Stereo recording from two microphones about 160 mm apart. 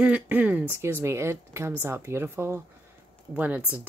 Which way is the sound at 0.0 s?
10° right (ahead or behind).